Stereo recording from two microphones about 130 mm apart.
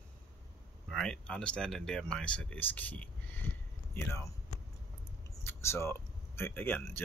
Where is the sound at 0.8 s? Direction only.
5° left (ahead or behind).